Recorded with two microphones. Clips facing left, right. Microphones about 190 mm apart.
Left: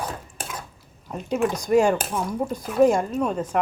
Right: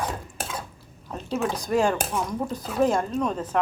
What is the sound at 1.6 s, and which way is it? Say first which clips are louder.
Speech: left 5 dB; 10° left (ahead or behind).